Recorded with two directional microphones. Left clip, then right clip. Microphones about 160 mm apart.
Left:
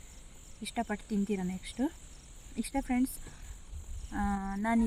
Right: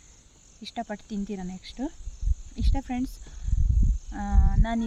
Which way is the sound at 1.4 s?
25° right (ahead or behind).